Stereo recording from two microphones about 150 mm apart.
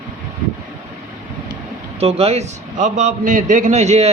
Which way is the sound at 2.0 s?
40° right (ahead or behind).